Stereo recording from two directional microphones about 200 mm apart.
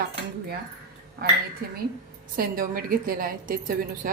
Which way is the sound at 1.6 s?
50° right (ahead or behind).